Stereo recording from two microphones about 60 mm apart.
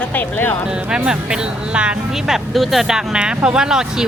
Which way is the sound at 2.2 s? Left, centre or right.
Centre.